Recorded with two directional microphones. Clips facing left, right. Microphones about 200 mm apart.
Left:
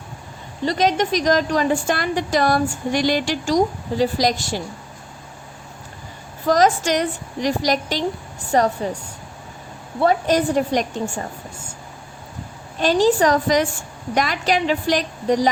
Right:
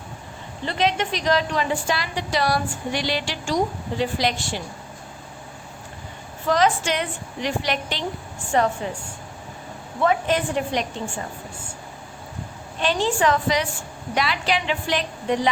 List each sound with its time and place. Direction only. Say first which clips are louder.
0.6 s a woman's voice: left 4 dB; 40° left (ahead or behind)
6.5 s a woman's voice: left 4 dB; 40° left (ahead or behind)
10.0 s a woman's voice: left 3 dB; 40° left (ahead or behind)
12.8 s a woman's voice: left 5 dB; 40° left (ahead or behind)